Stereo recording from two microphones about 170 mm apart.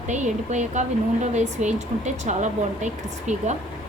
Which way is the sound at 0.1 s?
45° right (ahead or behind).